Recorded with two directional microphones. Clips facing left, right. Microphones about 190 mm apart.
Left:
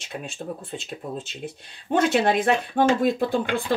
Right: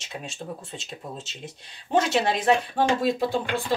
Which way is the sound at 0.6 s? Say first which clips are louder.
Left 4 dB; 55° left (ahead or behind).